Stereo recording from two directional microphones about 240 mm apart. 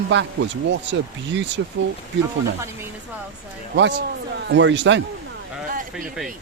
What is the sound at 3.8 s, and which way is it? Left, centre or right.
Speech, right.